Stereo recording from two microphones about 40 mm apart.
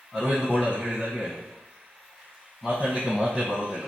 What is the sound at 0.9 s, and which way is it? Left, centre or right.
Speech, right.